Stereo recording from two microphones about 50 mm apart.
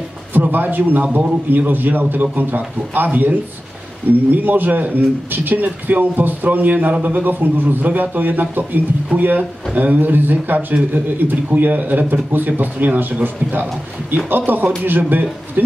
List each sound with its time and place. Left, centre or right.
0.3 s a man's voice: right
9.1 s speech: right
9.8 s a man's voice: right